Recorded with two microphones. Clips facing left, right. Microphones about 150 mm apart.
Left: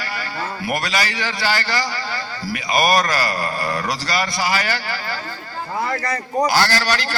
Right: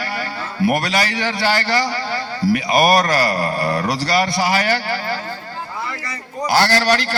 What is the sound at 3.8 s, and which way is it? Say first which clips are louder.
Speech: right 4 dB; 60° right (ahead or behind).